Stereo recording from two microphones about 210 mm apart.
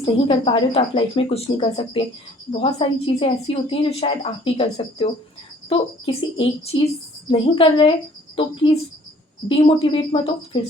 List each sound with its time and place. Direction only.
0.0 s speech: 25° left (ahead or behind)